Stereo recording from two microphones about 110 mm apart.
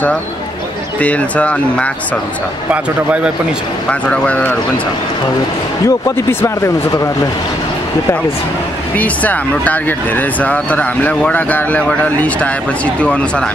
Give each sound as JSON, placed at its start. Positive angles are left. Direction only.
{"t": 1.0, "sound": "speech", "side_deg": 10}
{"t": 4.1, "sound": "speech", "side_deg": 10}
{"t": 5.9, "sound": "speech", "side_deg": 30}
{"t": 8.9, "sound": "speech", "side_deg": 15}